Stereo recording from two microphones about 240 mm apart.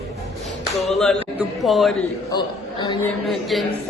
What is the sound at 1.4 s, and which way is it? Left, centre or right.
Speech, centre.